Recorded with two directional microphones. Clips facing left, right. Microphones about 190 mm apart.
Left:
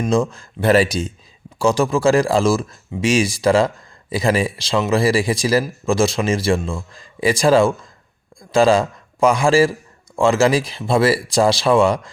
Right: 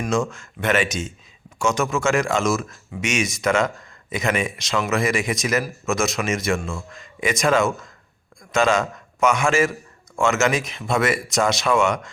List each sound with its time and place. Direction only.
0.0 s a man's voice: 35° left (ahead or behind)